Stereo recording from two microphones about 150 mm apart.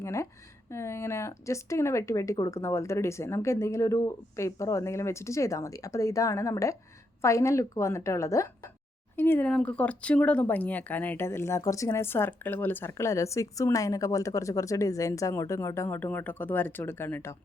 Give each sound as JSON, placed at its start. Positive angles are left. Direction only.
{"t": 0.0, "sound": "speech", "side_deg": 20}